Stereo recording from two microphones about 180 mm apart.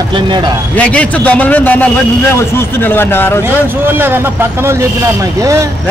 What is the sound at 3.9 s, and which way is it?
Speech, 10° right (ahead or behind).